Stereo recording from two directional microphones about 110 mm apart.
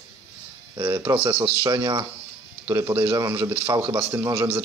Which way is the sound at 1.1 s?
30° right (ahead or behind).